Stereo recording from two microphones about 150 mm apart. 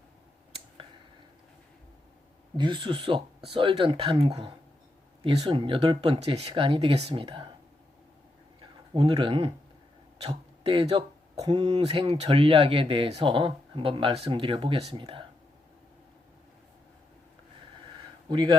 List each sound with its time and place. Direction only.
2.6 s speech: 30° right (ahead or behind)
8.9 s speech: 35° right (ahead or behind)
18.3 s a man's voice: 35° right (ahead or behind)